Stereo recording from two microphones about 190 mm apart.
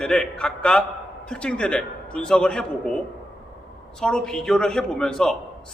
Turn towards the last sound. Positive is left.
turn(degrees=5)  # may be behind; listen again after turning